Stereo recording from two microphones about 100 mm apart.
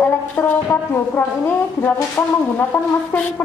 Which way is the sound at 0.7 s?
20° left (ahead or behind).